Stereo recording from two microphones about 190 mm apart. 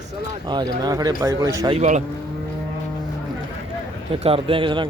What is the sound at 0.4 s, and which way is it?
Speech, 25° right (ahead or behind).